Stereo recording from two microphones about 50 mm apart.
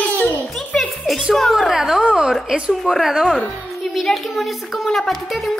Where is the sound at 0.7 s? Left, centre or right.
Centre.